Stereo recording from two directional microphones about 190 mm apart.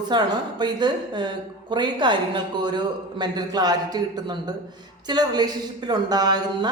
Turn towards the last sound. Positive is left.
turn(degrees=-20)  # may be behind; listen again after turning